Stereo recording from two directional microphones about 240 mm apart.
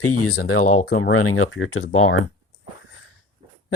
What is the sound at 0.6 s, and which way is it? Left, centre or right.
Speech, left.